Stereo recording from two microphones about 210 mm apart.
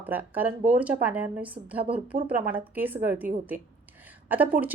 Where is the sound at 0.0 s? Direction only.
10° right (ahead or behind).